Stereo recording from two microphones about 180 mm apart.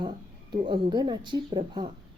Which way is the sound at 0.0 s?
25° right (ahead or behind).